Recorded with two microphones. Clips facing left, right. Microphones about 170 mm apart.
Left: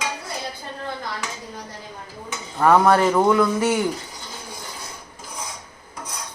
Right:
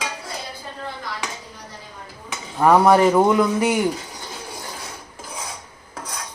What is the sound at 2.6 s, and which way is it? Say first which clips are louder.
A woman's voice: right 2 dB; 15° right (ahead or behind).